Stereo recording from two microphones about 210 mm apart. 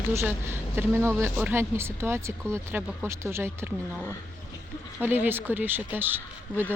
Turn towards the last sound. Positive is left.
turn(degrees=-10)  # may be behind; listen again after turning